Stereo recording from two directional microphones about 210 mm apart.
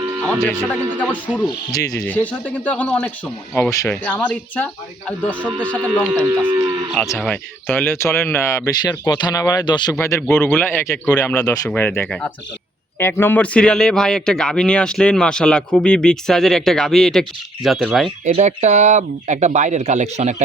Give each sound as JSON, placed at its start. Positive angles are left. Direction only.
{"t": 0.3, "sound": "a man's voice", "side_deg": 10}
{"t": 6.2, "sound": "speech", "side_deg": -15}
{"t": 7.2, "sound": "a man's voice", "side_deg": 5}
{"t": 18.3, "sound": "speech", "side_deg": -30}